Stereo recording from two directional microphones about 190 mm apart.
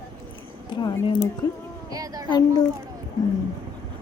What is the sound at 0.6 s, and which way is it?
Speech, 25° left (ahead or behind).